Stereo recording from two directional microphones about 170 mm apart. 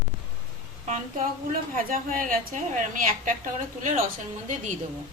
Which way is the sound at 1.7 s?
55° right (ahead or behind).